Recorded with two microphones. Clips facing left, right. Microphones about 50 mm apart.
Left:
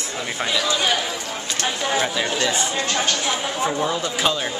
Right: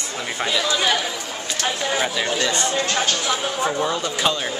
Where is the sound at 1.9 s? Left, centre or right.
Centre.